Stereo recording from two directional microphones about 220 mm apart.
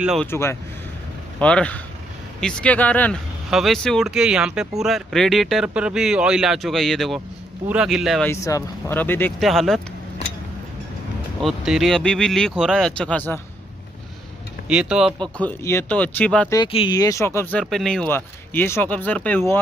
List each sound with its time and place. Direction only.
0.0 s speech: centre (ahead or behind)
0.3 s speech: 10° left (ahead or behind)
8.3 s speech: 15° left (ahead or behind)
11.4 s speech: centre (ahead or behind)
14.7 s speech: 5° right (ahead or behind)
15.3 s speech: 10° left (ahead or behind)
16.5 s speech: 20° left (ahead or behind)